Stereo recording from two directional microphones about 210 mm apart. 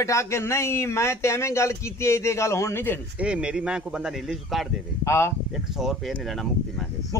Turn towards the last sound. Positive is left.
turn(degrees=0)  # may be behind; listen again after turning